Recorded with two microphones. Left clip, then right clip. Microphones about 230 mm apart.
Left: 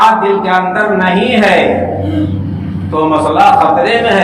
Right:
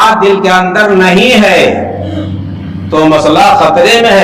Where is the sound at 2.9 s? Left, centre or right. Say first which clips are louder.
Right 4 dB; right.